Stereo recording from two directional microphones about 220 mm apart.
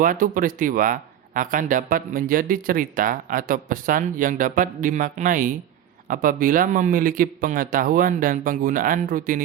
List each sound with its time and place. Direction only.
0.0 s speech: 40° right (ahead or behind)